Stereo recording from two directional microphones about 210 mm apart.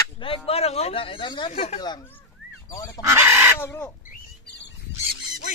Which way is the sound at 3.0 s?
10° right (ahead or behind).